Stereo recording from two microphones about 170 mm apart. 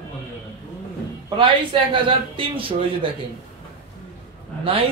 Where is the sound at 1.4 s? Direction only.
30° right (ahead or behind).